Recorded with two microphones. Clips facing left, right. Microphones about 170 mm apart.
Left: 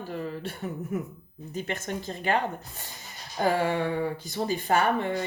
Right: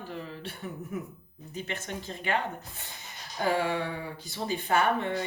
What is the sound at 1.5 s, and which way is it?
A woman's voice, 45° left (ahead or behind).